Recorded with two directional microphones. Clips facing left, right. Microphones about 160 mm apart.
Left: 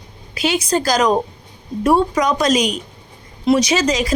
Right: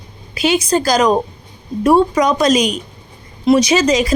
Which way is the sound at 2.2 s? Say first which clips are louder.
Right 3 dB; 20° right (ahead or behind).